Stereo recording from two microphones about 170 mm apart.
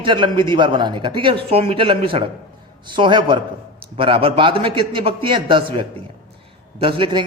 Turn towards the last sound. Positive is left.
turn(degrees=-30)  # may be behind; listen again after turning